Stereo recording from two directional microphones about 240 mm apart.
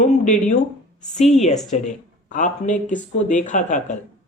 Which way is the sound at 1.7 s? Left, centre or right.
Left.